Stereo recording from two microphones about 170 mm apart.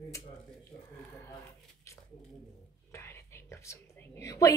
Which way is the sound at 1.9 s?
15° left (ahead or behind).